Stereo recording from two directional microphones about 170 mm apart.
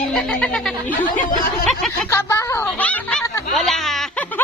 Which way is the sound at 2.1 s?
15° left (ahead or behind).